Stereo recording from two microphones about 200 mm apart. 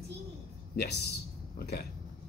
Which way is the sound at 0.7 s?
50° left (ahead or behind).